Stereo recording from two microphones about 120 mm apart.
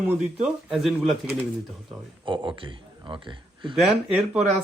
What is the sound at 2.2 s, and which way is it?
Speech, 45° right (ahead or behind).